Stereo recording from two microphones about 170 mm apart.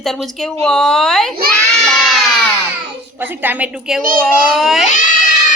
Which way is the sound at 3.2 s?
10° right (ahead or behind).